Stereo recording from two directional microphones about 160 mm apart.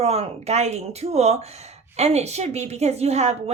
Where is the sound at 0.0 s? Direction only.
40° right (ahead or behind).